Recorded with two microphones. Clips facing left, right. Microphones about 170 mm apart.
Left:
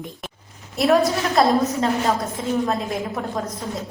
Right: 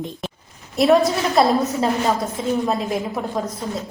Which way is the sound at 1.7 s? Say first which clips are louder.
Right 1 dB; centre (ahead or behind).